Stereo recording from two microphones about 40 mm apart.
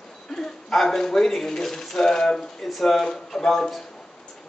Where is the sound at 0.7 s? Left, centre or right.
Centre.